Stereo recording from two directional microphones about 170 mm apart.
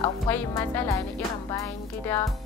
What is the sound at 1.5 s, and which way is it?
Music, 15° left (ahead or behind).